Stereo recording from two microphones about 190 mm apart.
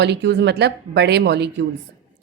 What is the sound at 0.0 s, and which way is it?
Speech, 65° right (ahead or behind).